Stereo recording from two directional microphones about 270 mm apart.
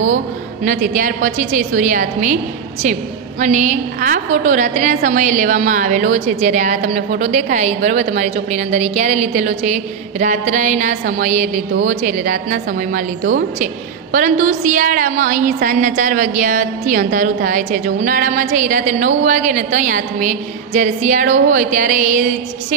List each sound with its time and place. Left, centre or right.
0.7 s a woman's voice: right
14.1 s a woman's voice: right